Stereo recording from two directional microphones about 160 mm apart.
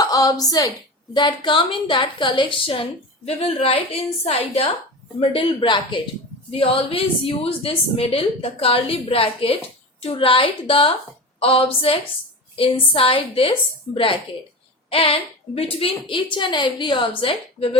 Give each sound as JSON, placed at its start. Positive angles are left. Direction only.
{"t": 0.0, "sound": "a woman's voice", "side_deg": 25}